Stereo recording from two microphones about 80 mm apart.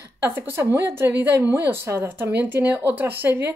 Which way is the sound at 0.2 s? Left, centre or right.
Right.